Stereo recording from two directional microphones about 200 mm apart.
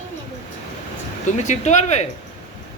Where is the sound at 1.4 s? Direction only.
35° left (ahead or behind).